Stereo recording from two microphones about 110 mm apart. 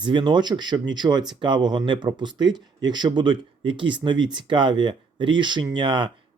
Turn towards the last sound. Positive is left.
turn(degrees=-45)  # may be behind; listen again after turning